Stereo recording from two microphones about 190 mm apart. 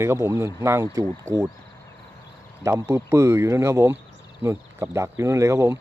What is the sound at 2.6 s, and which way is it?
Speech, 15° right (ahead or behind).